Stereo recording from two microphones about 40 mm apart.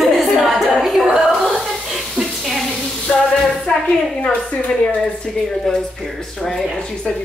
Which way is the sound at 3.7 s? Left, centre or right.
Centre.